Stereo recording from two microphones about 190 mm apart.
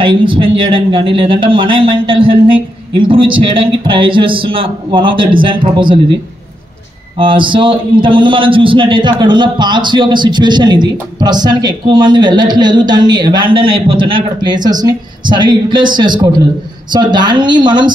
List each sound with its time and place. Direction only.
0.0 s a man's voice: 25° right (ahead or behind)
7.2 s a man's voice: 25° right (ahead or behind)